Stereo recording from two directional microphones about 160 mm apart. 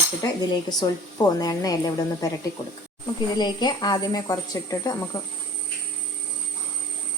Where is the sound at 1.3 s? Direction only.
25° left (ahead or behind).